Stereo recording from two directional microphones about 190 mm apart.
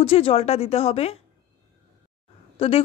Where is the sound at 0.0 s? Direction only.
30° left (ahead or behind).